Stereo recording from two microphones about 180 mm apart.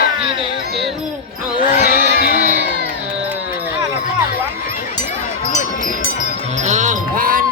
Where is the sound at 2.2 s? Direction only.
55° left (ahead or behind).